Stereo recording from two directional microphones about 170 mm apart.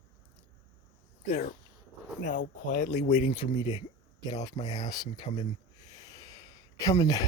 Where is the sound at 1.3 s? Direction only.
55° left (ahead or behind).